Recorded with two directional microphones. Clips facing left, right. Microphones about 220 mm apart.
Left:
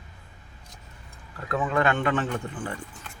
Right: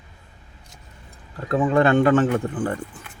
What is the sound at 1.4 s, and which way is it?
Speech, 30° right (ahead or behind).